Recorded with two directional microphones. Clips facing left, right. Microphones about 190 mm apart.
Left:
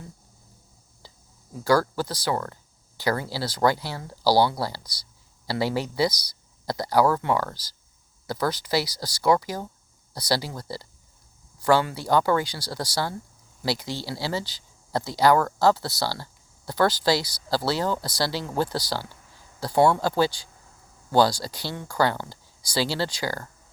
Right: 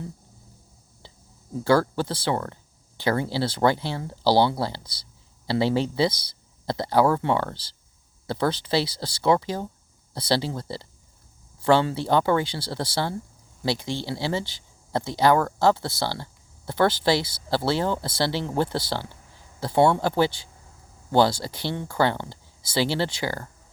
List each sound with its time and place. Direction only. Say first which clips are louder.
1.5 s speech: right 1 dB; 25° right (ahead or behind)